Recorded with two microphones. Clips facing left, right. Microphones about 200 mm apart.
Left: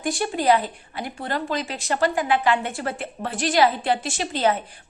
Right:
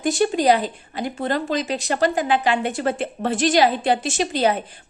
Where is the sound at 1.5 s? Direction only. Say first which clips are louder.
Right 3 dB; 20° right (ahead or behind).